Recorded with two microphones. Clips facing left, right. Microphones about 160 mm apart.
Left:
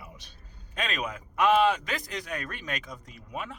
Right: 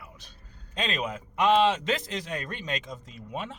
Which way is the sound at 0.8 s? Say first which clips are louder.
Right 2 dB; 25° right (ahead or behind).